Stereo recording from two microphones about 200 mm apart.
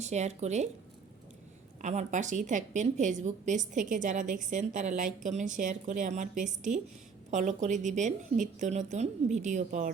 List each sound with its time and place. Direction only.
0.0 s a woman's voice: 35° right (ahead or behind)
1.8 s a woman's voice: 35° right (ahead or behind)